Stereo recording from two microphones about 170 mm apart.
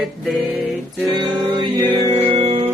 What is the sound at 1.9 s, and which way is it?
Music, 25° right (ahead or behind).